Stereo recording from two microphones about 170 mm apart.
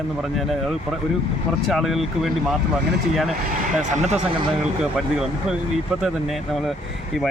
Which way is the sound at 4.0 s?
40° right (ahead or behind).